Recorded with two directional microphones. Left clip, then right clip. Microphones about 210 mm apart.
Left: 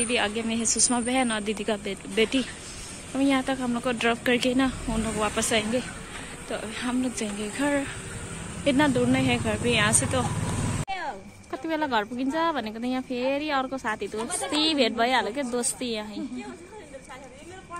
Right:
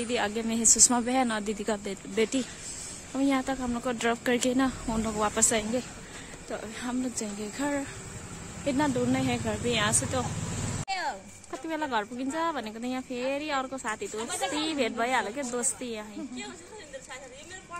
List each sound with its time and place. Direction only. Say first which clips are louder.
0.0 s a woman's voice: left 3 dB; 20° right (ahead or behind)
10.9 s a sound: right 3 dB; 55° right (ahead or behind)
11.5 s speech: left 4 dB; 5° right (ahead or behind)